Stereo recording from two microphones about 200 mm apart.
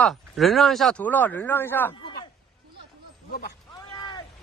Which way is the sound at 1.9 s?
25° left (ahead or behind).